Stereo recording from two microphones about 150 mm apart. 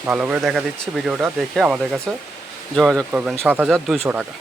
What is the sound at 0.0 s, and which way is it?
Speech, 10° right (ahead or behind).